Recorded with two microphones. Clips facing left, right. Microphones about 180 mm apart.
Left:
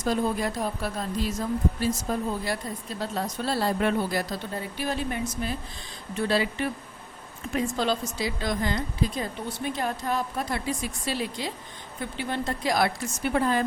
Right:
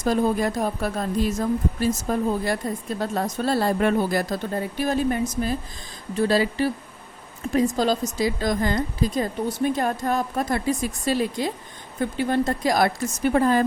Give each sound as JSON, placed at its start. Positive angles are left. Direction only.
{"t": 0.0, "sound": "a woman's voice", "side_deg": -50}